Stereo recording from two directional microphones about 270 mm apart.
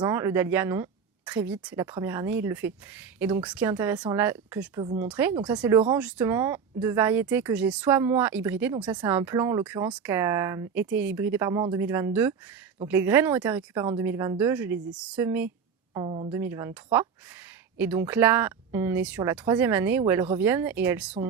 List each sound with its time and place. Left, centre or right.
0.0 s speech: centre
16.0 s speech: centre
16.3 s speech: centre